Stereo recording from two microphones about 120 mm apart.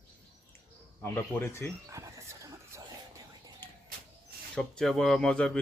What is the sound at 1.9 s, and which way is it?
Horse, 25° right (ahead or behind).